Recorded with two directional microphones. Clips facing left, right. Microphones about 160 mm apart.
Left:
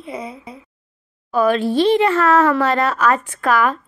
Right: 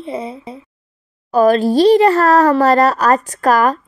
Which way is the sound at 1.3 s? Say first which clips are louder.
Right 5 dB; 40° right (ahead or behind).